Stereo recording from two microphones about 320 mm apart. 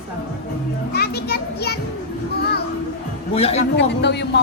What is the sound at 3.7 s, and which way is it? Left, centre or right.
Speech, left.